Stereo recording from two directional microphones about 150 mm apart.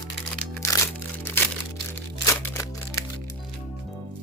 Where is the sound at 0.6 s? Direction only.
15° left (ahead or behind).